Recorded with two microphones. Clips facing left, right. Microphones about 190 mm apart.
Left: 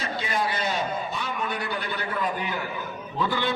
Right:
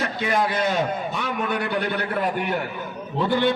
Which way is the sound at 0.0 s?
60° right (ahead or behind).